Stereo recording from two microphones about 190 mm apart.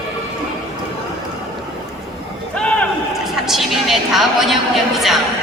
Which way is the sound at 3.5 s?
Centre (ahead or behind).